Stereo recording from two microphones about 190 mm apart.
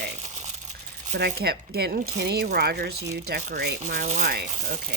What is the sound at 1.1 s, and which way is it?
Speech, 55° right (ahead or behind).